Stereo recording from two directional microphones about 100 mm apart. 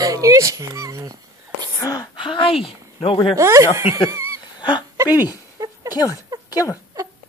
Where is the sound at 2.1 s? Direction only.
55° left (ahead or behind); by 3.3 s 70° left (ahead or behind).